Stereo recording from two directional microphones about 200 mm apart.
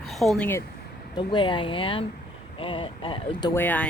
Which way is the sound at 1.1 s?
25° left (ahead or behind).